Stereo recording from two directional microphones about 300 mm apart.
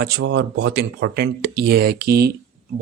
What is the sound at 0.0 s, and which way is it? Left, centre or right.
Speech, right.